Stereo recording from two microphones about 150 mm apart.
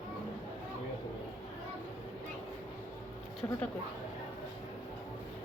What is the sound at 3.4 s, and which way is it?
Speech, 20° left (ahead or behind).